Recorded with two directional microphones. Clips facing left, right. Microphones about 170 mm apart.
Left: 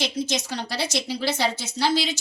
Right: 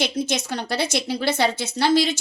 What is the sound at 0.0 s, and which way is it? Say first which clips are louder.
A woman's voice: right 3 dB; 55° right (ahead or behind).